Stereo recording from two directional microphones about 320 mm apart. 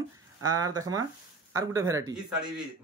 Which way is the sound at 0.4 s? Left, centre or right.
Centre.